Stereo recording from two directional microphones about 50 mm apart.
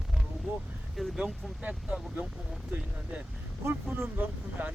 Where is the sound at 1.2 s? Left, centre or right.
Right.